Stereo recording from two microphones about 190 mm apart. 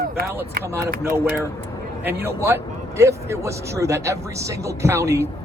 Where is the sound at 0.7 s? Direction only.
15° right (ahead or behind).